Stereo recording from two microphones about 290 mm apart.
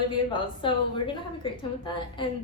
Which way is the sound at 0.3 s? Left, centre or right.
Centre.